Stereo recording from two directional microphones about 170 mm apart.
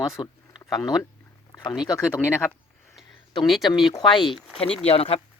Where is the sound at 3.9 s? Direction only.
25° left (ahead or behind).